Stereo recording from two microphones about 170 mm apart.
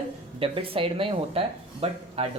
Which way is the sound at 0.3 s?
35° right (ahead or behind).